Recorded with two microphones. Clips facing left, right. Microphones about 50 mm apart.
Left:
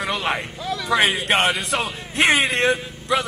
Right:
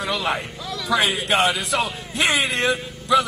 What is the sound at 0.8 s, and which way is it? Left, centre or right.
A man's voice, left.